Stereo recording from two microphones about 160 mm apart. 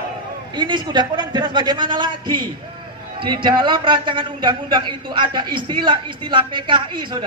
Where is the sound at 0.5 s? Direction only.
30° right (ahead or behind).